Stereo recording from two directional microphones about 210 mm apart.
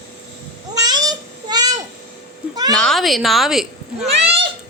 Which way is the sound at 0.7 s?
20° right (ahead or behind).